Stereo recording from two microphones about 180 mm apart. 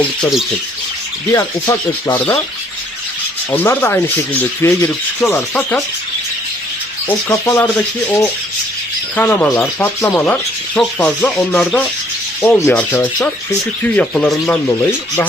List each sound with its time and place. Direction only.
0.0 s rub: centre (ahead or behind)
1.3 s speech: 15° left (ahead or behind)
3.5 s speech: 10° left (ahead or behind)
7.3 s speech: 15° left (ahead or behind)
10.8 s rub: 5° left (ahead or behind)
12.5 s speech: 15° left (ahead or behind)